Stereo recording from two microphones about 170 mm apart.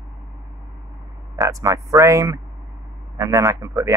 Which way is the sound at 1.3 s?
20° right (ahead or behind).